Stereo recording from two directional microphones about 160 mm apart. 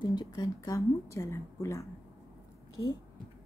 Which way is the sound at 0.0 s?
25° left (ahead or behind).